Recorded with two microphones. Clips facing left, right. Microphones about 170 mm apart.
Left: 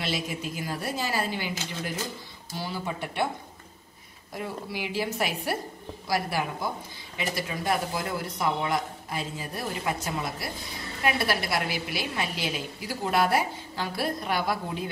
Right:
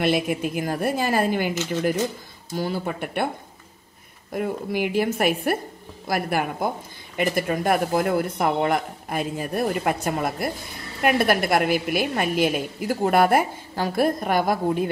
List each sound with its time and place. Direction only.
0.0 s a woman's voice: 55° right (ahead or behind)
4.3 s a woman's voice: 55° right (ahead or behind)